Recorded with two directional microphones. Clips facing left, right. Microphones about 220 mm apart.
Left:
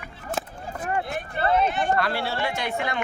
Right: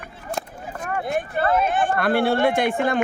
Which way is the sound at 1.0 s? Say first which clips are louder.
Right 4 dB; 50° right (ahead or behind).